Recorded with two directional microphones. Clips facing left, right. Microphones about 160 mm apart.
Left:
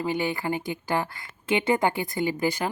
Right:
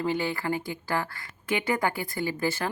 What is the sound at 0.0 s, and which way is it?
Speech, 15° left (ahead or behind).